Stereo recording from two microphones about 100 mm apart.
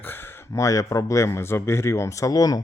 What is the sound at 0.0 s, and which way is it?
Speech, 20° left (ahead or behind).